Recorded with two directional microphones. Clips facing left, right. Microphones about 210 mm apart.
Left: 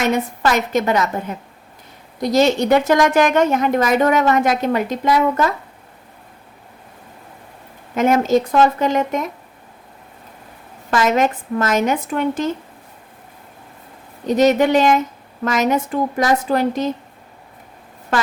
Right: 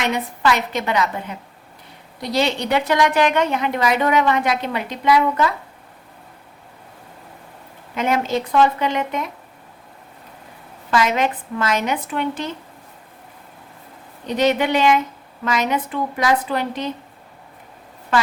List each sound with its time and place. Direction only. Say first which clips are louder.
0.0 s a woman's voice: left 3 dB; 45° left (ahead or behind)
7.9 s a woman's voice: left 6 dB; 45° left (ahead or behind)
10.9 s a woman's voice: left 3 dB; 45° left (ahead or behind)
14.3 s a woman's voice: left 5 dB; 45° left (ahead or behind)